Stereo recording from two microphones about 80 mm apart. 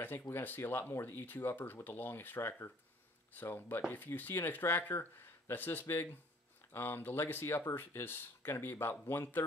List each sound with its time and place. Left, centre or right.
0.0 s speech: left